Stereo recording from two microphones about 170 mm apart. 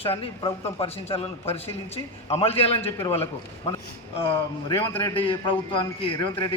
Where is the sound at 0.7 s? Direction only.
35° left (ahead or behind).